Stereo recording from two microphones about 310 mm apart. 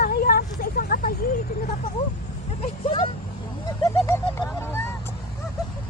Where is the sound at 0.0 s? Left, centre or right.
Left.